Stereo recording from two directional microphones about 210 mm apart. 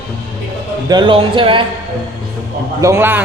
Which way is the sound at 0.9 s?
20° right (ahead or behind).